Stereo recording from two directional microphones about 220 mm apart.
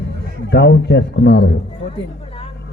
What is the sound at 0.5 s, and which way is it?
Speech, 50° left (ahead or behind).